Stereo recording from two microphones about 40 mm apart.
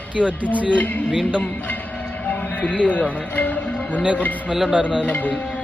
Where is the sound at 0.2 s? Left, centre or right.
Right.